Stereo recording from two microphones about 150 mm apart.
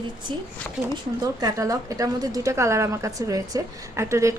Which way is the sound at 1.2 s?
25° right (ahead or behind).